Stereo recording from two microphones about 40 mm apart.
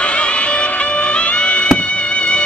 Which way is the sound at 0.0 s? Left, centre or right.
Left.